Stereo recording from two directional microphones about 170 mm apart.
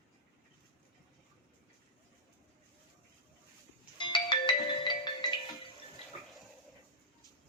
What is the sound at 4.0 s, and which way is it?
Music, 30° left (ahead or behind).